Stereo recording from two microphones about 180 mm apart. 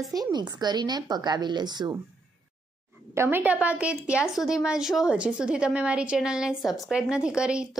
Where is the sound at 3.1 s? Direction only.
15° right (ahead or behind).